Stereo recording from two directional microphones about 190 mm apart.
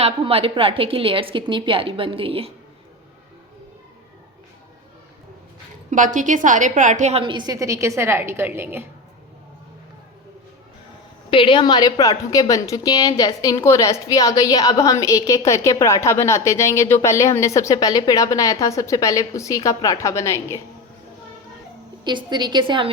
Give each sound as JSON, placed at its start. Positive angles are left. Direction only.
{"t": 0.0, "sound": "a woman's voice", "side_deg": -30}
{"t": 5.9, "sound": "a woman's voice", "side_deg": -40}
{"t": 11.3, "sound": "a woman's voice", "side_deg": 25}
{"t": 22.0, "sound": "a woman's voice", "side_deg": -25}